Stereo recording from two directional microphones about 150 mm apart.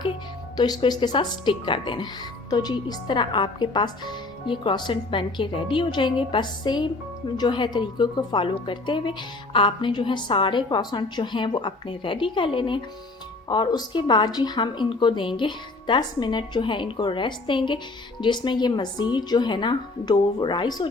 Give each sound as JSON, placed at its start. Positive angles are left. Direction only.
{"t": 0.5, "sound": "a woman's voice", "side_deg": 30}